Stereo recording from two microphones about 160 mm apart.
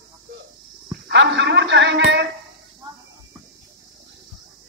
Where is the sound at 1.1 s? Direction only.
90° right.